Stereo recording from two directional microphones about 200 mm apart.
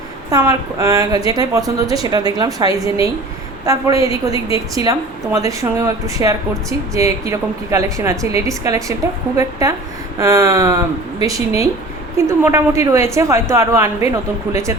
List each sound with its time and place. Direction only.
0.3 s a woman's voice: 15° right (ahead or behind)